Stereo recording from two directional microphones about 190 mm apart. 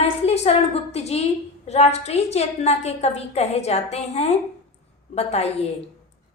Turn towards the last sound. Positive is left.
turn(degrees=35)  # may be behind; listen again after turning